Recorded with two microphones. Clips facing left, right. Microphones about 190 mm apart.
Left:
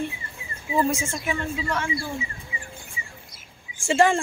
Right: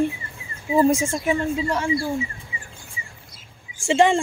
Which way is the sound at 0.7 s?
35° right (ahead or behind).